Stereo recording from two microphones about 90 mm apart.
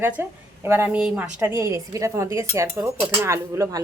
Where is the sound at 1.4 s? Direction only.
30° right (ahead or behind).